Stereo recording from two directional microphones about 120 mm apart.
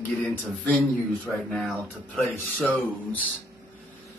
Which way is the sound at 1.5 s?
Centre (ahead or behind).